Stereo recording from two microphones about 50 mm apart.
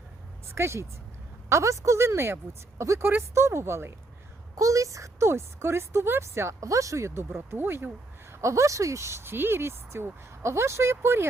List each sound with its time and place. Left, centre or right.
0.5 s speech: right
1.5 s speech: right
3.0 s speech: right
4.6 s a woman's voice: right
7.3 s speech: right
8.4 s speech: right
9.2 s speech: right